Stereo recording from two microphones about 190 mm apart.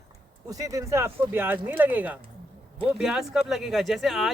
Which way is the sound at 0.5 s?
15° right (ahead or behind).